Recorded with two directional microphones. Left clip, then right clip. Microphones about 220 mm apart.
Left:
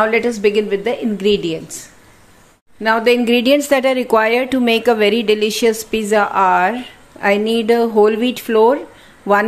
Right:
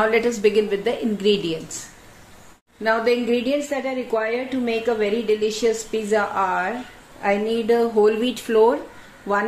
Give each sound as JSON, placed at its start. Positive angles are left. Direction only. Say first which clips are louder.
{"t": 0.0, "sound": "a woman's voice", "louder": "left 4 dB", "side_deg": 25}